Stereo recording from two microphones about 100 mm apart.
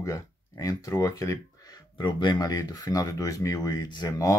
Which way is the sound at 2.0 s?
45° left (ahead or behind).